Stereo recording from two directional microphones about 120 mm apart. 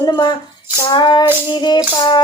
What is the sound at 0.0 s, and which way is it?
Music, 35° left (ahead or behind).